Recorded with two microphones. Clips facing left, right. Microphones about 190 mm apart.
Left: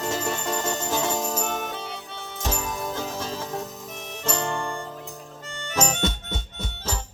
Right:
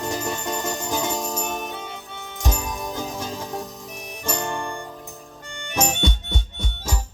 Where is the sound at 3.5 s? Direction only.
Centre (ahead or behind).